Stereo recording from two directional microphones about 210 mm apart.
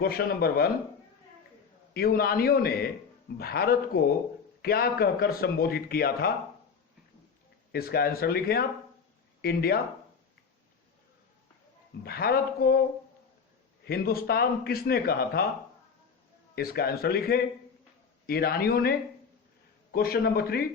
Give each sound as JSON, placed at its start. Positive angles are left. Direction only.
{"t": 0.0, "sound": "a man's voice", "side_deg": 45}
{"t": 1.9, "sound": "a man's voice", "side_deg": 45}
{"t": 7.7, "sound": "a man's voice", "side_deg": 45}
{"t": 12.0, "sound": "a man's voice", "side_deg": 45}
{"t": 13.8, "sound": "a man's voice", "side_deg": 45}
{"t": 16.6, "sound": "a man's voice", "side_deg": 45}